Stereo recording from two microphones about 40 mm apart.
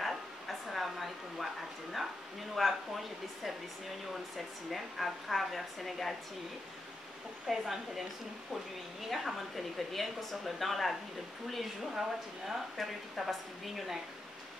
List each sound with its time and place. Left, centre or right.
0.0 s a sound: centre
2.5 s a woman's voice: centre
4.6 s a woman's voice: centre
7.4 s a woman's voice: centre
9.1 s a woman's voice: centre